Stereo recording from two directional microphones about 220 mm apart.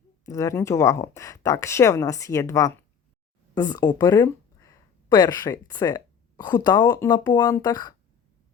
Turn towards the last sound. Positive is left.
turn(degrees=15)  # may be behind; listen again after turning